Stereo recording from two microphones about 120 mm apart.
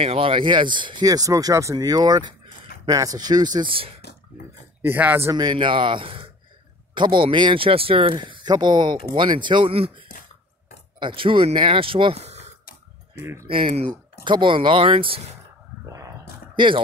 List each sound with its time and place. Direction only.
0.0 s speech: 50° right (ahead or behind); by 3.7 s 35° right (ahead or behind)
4.8 s speech: 15° right (ahead or behind)
5.3 s speech: 35° right (ahead or behind); by 12.5 s 65° right (ahead or behind)
13.2 s speech: 20° right (ahead or behind)
14.2 s speech: 40° right (ahead or behind)
15.8 s a sound: 25° right (ahead or behind)
16.5 s speech: 45° right (ahead or behind)